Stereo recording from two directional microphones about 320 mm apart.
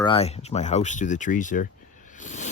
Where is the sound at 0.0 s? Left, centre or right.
Centre.